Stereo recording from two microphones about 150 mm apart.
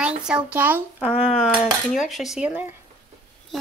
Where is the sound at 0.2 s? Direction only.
10° right (ahead or behind).